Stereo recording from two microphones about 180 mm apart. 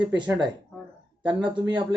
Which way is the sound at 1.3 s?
25° right (ahead or behind).